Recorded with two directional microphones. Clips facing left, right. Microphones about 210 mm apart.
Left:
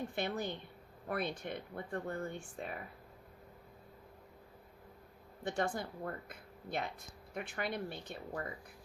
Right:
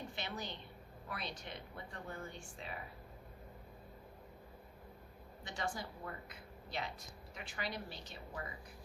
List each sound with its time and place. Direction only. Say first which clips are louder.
0.2 s a woman's voice: left 8 dB; 55° left (ahead or behind)
5.4 s speech: left 7 dB; 55° left (ahead or behind)